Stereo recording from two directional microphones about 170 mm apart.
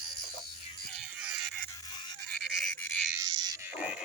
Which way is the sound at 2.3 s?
5° left (ahead or behind).